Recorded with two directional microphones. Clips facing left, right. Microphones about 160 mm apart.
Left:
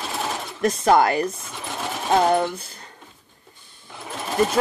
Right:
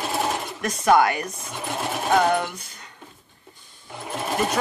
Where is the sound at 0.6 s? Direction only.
30° left (ahead or behind).